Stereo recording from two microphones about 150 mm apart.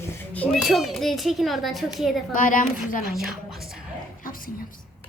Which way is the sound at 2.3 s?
65° left (ahead or behind).